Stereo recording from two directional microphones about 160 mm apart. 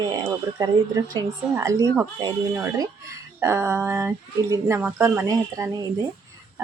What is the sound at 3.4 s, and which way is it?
Speech, 15° right (ahead or behind).